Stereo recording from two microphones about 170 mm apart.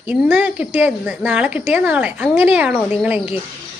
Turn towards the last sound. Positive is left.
turn(degrees=-10)  # may be behind; listen again after turning